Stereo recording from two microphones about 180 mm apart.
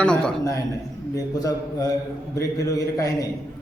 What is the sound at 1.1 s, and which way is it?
A man's voice, 20° left (ahead or behind).